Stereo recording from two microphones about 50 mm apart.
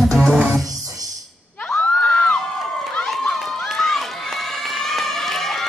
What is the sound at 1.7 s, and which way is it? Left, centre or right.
Screaming, left.